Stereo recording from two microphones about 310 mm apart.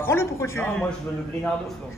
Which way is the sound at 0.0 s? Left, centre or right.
Centre.